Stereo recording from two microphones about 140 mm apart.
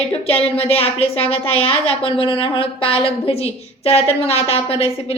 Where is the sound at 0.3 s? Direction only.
45° left (ahead or behind).